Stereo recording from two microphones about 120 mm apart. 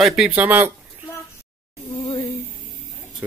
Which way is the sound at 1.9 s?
40° left (ahead or behind).